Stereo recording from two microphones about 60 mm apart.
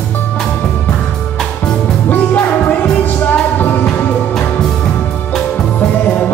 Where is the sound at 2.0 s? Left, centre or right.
Left.